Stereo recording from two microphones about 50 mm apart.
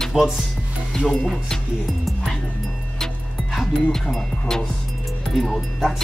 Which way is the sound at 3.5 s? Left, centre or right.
Centre.